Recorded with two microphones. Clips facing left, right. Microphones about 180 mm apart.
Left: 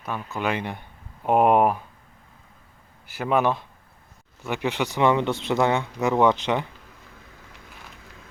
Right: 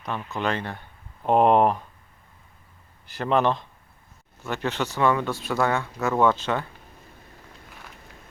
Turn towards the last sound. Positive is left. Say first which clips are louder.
# left 2 dB
turn(degrees=15)  # may be behind; listen again after turning